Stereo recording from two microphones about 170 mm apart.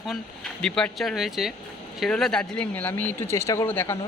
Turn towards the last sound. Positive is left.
turn(degrees=15)  # may be behind; listen again after turning